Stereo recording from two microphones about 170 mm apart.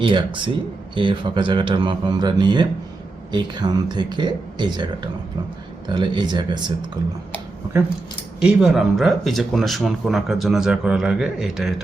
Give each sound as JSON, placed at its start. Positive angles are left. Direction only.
{"t": 0.0, "sound": "speech", "side_deg": -30}
{"t": 5.9, "sound": "speech", "side_deg": -25}
{"t": 8.4, "sound": "speech", "side_deg": -5}